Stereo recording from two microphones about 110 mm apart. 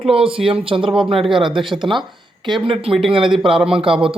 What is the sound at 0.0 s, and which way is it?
Speech, 55° right (ahead or behind).